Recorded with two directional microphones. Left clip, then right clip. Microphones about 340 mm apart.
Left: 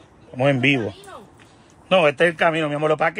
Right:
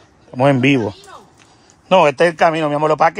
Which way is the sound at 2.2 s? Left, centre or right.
Right.